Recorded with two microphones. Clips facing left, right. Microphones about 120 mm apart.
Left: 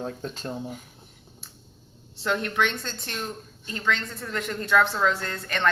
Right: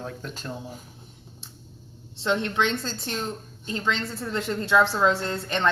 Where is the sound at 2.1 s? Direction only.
25° right (ahead or behind).